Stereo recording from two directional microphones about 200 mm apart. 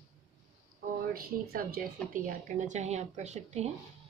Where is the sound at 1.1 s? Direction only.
45° right (ahead or behind).